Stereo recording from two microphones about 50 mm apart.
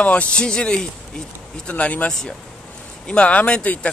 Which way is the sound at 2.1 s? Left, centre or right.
Centre.